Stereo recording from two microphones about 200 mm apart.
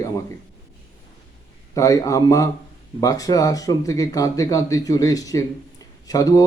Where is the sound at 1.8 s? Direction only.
15° left (ahead or behind).